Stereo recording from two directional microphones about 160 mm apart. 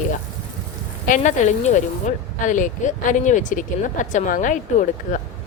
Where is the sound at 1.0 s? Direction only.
55° left (ahead or behind).